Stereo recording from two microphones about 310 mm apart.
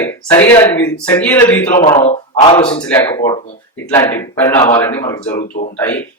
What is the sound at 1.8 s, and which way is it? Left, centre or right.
Speech, centre.